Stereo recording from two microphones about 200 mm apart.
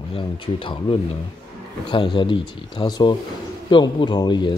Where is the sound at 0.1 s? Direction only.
25° left (ahead or behind).